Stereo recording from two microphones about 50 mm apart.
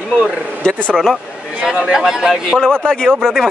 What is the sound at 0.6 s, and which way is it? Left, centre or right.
Speech, centre.